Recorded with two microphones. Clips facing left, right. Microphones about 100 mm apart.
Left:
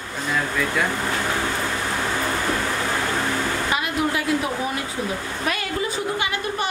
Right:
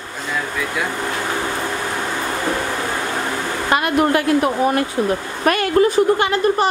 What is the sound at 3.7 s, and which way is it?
A woman's voice, 55° right (ahead or behind).